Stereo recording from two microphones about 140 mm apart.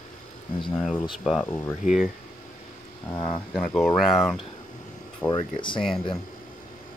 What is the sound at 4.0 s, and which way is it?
Speech, centre (ahead or behind).